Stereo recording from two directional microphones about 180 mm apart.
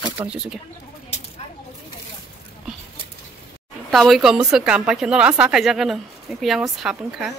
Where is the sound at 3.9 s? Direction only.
Centre (ahead or behind).